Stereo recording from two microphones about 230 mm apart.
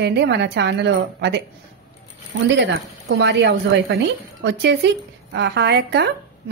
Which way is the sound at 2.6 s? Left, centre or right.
Right.